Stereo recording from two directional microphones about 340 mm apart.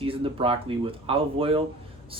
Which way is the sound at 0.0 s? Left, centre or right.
Centre.